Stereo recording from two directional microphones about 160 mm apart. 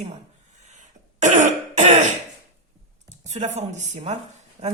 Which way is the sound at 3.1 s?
50° right (ahead or behind).